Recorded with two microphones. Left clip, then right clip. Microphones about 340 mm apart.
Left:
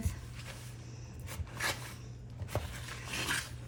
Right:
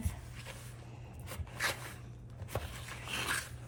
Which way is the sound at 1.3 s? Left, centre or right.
Centre.